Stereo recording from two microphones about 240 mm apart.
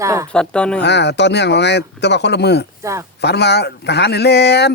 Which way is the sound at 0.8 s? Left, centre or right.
Left.